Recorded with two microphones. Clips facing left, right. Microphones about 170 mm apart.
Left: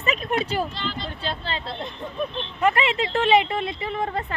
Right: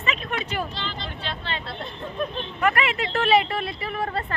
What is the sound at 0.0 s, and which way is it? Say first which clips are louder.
Speech: left 4 dB; 40° left (ahead or behind).